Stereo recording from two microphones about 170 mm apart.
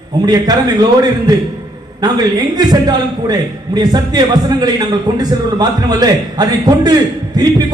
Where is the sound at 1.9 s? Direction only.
25° right (ahead or behind).